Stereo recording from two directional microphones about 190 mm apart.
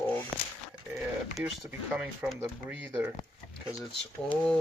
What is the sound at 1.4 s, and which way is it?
Speech, 10° right (ahead or behind).